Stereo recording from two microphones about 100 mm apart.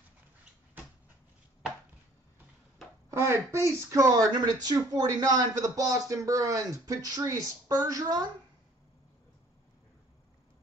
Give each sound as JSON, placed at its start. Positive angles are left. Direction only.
{"t": 3.1, "sound": "speech", "side_deg": -25}